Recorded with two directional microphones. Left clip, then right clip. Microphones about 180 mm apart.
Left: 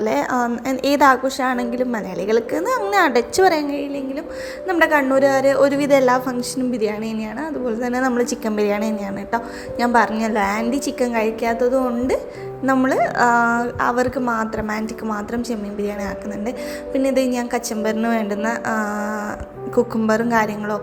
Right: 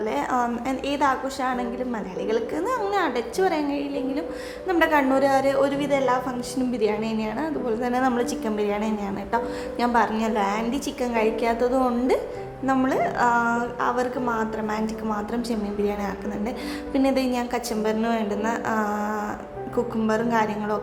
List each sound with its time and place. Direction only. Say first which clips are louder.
0.0 s a woman's voice: left 5 dB; 20° left (ahead or behind)
0.9 s a woman's voice: left 9 dB; 30° left (ahead or behind)
7.7 s a woman's voice: left 2 dB; 10° left (ahead or behind)
12.6 s a woman's voice: left 5 dB; 15° left (ahead or behind)
16.9 s a woman's voice: left 4 dB; 10° left (ahead or behind)